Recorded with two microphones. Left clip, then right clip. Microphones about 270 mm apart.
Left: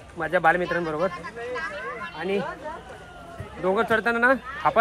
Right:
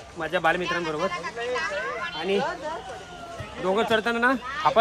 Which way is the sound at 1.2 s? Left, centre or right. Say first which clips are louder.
Right 3 dB; right.